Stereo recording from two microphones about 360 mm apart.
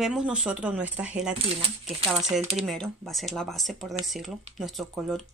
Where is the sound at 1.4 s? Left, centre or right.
Centre.